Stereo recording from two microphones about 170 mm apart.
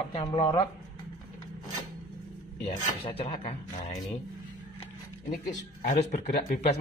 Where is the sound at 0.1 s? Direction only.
30° left (ahead or behind).